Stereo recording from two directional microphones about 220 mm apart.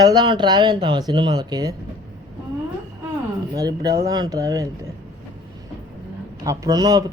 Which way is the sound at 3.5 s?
15° right (ahead or behind).